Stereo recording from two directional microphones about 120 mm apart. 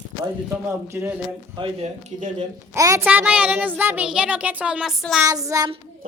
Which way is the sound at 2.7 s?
25° right (ahead or behind).